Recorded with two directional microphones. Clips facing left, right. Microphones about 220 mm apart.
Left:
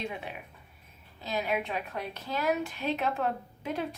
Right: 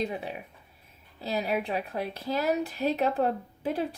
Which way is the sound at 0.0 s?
35° right (ahead or behind).